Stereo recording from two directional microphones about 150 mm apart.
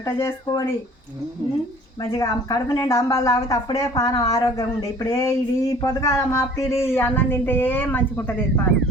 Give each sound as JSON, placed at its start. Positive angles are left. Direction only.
{"t": 0.0, "sound": "speech", "side_deg": 20}
{"t": 2.0, "sound": "speech", "side_deg": 25}